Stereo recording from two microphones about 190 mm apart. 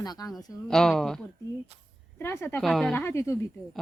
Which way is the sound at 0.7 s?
Centre (ahead or behind).